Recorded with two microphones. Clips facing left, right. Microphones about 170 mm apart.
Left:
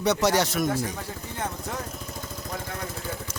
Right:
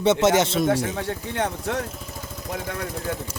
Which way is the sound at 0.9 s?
80° right.